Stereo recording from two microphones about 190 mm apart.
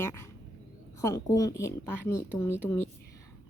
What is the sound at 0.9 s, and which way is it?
Speech, 15° left (ahead or behind).